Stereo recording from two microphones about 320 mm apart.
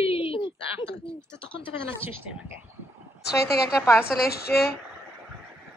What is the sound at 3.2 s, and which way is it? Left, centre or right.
A woman's voice, left.